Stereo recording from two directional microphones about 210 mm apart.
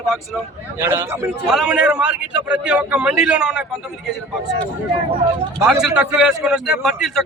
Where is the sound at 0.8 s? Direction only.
10° right (ahead or behind).